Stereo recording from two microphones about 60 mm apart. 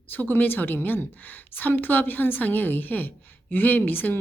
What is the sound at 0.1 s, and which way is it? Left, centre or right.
A woman's voice, left.